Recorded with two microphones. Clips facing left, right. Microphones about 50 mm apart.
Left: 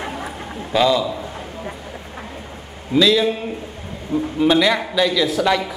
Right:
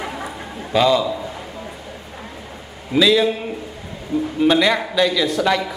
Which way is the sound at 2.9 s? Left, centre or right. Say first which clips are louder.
Even; centre.